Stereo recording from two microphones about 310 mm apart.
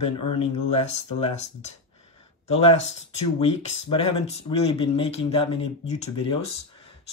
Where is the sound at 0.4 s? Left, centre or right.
Centre.